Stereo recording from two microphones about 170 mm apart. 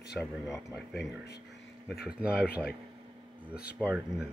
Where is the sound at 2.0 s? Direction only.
5° right (ahead or behind).